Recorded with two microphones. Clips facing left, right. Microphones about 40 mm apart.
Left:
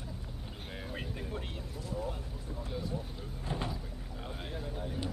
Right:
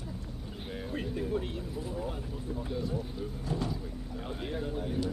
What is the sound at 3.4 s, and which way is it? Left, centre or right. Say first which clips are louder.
Speech: right 2 dB; left.